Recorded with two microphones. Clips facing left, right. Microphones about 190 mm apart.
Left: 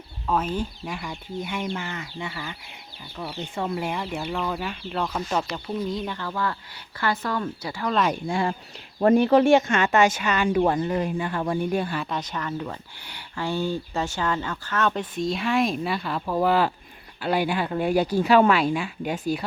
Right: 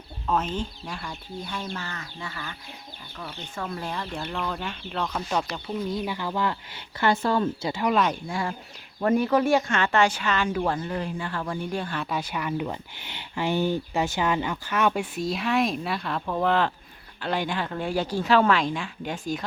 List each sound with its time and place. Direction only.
0.3 s speech: 10° left (ahead or behind)
3.8 s speech: 10° left (ahead or behind)
6.1 s speech: 15° right (ahead or behind)
9.0 s speech: 30° left (ahead or behind)
11.7 s speech: 10° left (ahead or behind)
12.0 s speech: 10° right (ahead or behind); by 19.2 s 10° left (ahead or behind)